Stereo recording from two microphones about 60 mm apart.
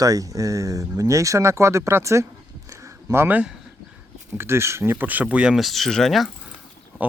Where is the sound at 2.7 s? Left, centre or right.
Right.